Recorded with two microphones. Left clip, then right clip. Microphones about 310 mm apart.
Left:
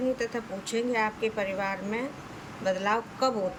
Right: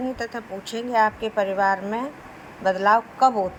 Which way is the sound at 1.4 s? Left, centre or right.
Right.